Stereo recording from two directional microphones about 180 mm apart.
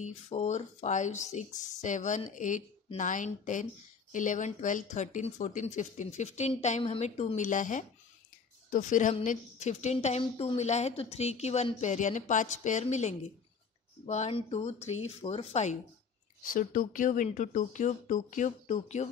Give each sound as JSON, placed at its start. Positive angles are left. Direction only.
{"t": 0.0, "sound": "a woman's voice", "side_deg": 40}